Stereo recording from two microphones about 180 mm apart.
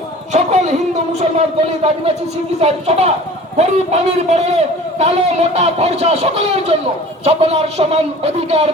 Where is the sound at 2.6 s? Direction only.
35° right (ahead or behind).